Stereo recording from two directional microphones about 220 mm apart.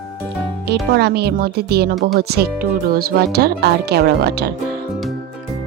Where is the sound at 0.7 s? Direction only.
50° right (ahead or behind).